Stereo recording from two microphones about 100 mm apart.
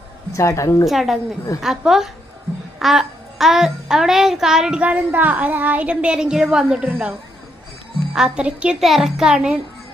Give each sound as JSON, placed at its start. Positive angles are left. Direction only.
{"t": 0.3, "sound": "a woman's voice", "side_deg": 30}
{"t": 0.9, "sound": "a woman's voice", "side_deg": 0}
{"t": 8.1, "sound": "a child's voice", "side_deg": -10}